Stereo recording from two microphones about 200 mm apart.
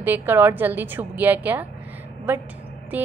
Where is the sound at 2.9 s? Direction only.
10° right (ahead or behind).